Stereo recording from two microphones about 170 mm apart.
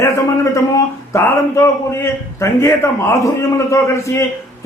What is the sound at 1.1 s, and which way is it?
A man's voice, 15° left (ahead or behind).